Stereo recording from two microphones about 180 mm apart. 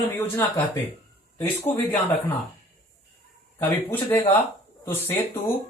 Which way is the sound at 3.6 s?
10° left (ahead or behind).